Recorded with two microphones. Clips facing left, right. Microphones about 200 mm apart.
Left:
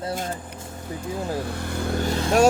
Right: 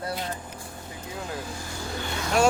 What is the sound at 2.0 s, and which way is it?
Vehicle, 35° left (ahead or behind).